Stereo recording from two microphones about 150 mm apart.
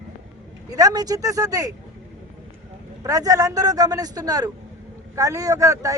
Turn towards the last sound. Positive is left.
turn(degrees=-20)  # may be behind; listen again after turning